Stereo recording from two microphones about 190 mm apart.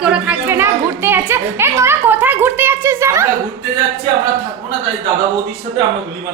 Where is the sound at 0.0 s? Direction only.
5° right (ahead or behind).